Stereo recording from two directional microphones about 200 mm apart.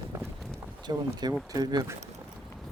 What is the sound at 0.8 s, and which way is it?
Speech, 20° right (ahead or behind).